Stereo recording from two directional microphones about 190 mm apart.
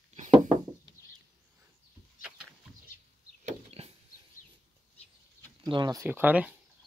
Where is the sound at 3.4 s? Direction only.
30° right (ahead or behind).